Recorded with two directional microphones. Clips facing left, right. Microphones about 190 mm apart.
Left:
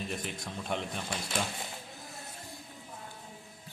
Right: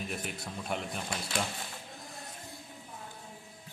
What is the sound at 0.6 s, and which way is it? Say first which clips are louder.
Speech: left 1 dB; 5° right (ahead or behind).